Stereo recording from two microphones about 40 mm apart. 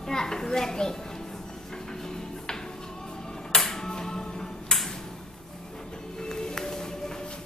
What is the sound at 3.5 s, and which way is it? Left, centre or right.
Music, centre.